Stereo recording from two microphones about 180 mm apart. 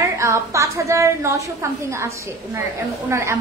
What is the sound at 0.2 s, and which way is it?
A woman's voice, 15° right (ahead or behind).